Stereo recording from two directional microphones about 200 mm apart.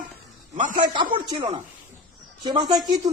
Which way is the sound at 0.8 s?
20° right (ahead or behind).